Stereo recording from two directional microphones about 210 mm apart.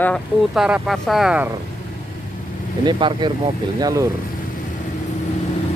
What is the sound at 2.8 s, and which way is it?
Speech, 20° right (ahead or behind).